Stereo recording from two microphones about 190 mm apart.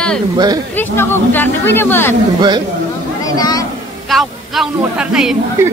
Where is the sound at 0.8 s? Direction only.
10° left (ahead or behind).